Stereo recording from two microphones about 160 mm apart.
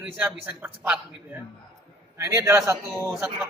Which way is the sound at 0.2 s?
10° right (ahead or behind).